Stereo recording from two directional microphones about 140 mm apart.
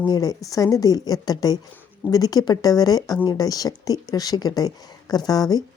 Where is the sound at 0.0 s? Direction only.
30° left (ahead or behind).